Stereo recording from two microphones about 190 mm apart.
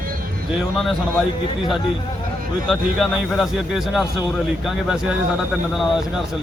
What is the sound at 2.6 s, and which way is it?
Speech, centre (ahead or behind).